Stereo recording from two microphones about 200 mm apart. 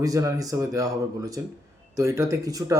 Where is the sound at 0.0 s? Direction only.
15° right (ahead or behind).